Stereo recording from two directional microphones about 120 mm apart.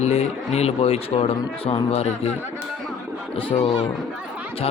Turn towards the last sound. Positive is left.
turn(degrees=55)  # may be behind; listen again after turning